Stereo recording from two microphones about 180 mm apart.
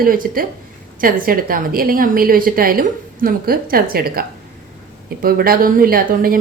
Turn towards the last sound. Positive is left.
turn(degrees=-55)  # may be behind; listen again after turning